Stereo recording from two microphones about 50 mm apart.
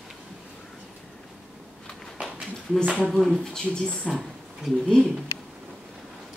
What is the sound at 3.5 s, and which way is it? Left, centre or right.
Speech, centre.